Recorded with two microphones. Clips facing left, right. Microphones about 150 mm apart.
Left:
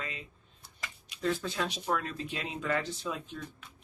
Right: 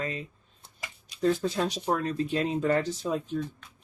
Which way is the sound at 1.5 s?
40° right (ahead or behind).